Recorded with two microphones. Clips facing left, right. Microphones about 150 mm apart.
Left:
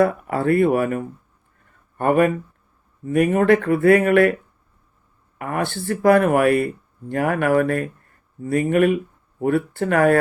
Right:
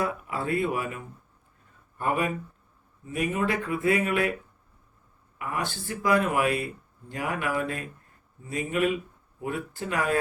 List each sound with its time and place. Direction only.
0.0 s speech: 55° left (ahead or behind)
5.4 s speech: 60° left (ahead or behind)